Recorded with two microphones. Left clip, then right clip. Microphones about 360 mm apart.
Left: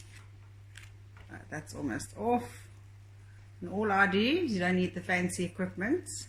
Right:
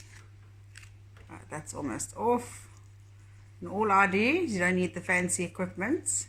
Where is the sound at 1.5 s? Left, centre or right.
Centre.